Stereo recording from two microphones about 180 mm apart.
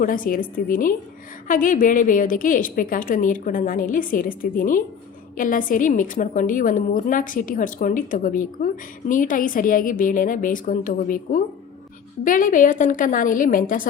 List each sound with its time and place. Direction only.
0.0 s a woman's voice: 50° left (ahead or behind)